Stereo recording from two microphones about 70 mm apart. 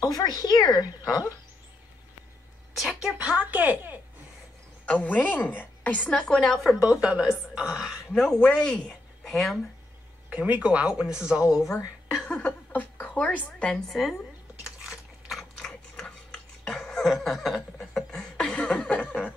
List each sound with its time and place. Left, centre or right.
0.0 s speech: left
2.7 s a woman's voice: centre
3.2 s speech: right
4.8 s a woman's voice: left
6.3 s speech: centre
6.9 s a woman's voice: centre
8.4 s a woman's voice: centre
10.3 s speech: right
12.1 s a sound: centre
12.4 s a sound: left
13.6 s a woman's voice: centre
13.8 s speech: centre
14.6 s a sound: centre; by 19.2 s left